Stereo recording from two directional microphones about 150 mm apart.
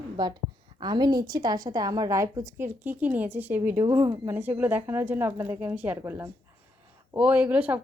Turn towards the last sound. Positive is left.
turn(degrees=-10)  # may be behind; listen again after turning